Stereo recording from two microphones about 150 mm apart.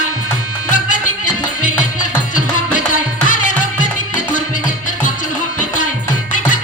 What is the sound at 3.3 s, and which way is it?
Music, 60° left (ahead or behind).